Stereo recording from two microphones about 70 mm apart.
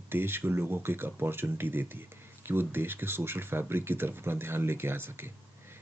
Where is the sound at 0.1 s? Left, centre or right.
Right.